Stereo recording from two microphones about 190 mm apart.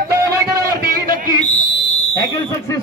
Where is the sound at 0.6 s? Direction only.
50° right (ahead or behind).